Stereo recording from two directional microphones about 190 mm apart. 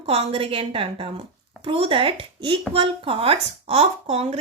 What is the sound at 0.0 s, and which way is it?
A woman's voice, 30° right (ahead or behind).